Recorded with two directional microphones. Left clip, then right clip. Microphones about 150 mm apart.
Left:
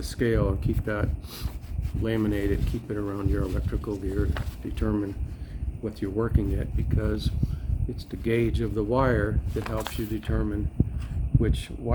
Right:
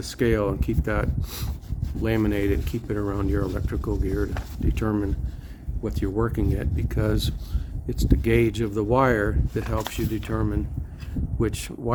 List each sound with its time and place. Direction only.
0.0 s speech: 45° right (ahead or behind)
6.8 s speech: 65° right (ahead or behind); by 7.3 s 80° right
7.9 s speech: 70° right (ahead or behind); by 10.6 s 45° right (ahead or behind)
11.3 s speech: 60° right (ahead or behind)